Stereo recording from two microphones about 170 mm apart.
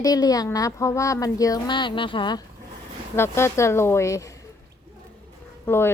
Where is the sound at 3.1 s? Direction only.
15° left (ahead or behind).